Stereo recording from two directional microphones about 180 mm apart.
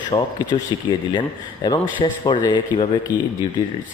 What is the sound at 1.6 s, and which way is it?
Speech, 25° left (ahead or behind).